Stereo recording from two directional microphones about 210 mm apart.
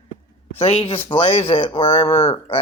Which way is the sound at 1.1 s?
25° left (ahead or behind).